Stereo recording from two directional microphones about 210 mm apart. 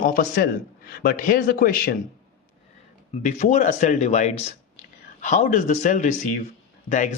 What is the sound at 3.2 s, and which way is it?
Speech, 35° left (ahead or behind).